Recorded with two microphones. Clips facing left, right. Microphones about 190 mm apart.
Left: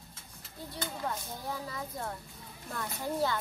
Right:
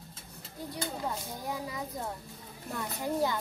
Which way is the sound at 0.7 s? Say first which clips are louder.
Right 1 dB; 15° right (ahead or behind).